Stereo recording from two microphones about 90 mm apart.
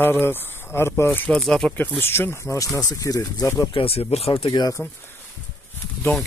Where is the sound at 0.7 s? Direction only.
30° left (ahead or behind).